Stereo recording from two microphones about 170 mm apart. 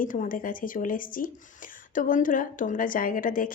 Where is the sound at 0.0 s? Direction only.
50° left (ahead or behind).